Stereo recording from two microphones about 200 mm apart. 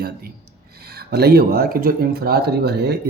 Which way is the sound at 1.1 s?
50° right (ahead or behind).